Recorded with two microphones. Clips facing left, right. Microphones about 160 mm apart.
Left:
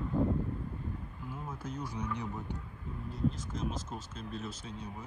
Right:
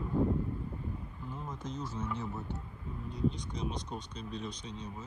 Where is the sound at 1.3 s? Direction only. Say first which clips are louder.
Even; 10° left (ahead or behind).